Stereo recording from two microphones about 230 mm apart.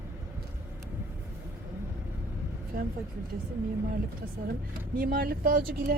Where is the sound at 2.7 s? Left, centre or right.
Right.